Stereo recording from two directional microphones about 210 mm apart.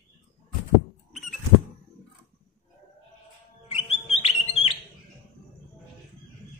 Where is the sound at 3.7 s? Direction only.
30° left (ahead or behind).